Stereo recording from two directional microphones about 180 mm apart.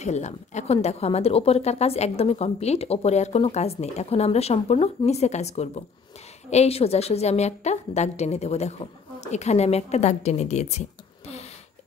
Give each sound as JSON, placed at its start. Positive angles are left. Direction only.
{"t": 0.0, "sound": "a woman's voice", "side_deg": 40}